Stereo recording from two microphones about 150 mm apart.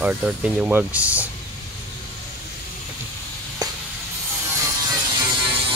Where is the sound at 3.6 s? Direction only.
25° right (ahead or behind).